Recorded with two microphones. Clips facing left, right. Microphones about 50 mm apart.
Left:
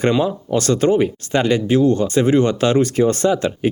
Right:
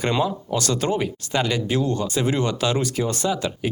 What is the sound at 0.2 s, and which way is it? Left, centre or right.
Speech, left.